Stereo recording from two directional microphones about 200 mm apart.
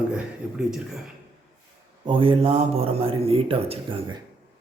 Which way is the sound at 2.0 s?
25° right (ahead or behind).